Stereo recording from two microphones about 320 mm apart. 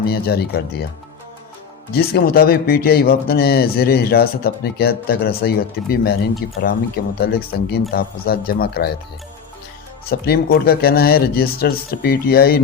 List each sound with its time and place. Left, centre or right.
0.0 s speech: left
1.9 s speech: left
10.1 s speech: left